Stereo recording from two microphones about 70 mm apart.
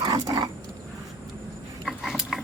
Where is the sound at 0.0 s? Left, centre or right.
Right.